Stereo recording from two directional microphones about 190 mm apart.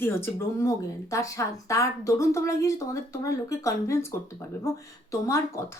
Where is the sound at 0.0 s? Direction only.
10° left (ahead or behind).